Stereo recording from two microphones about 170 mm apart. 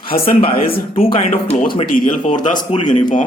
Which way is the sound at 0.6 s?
60° left (ahead or behind).